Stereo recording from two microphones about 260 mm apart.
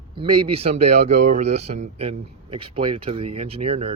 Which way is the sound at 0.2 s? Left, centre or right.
Centre.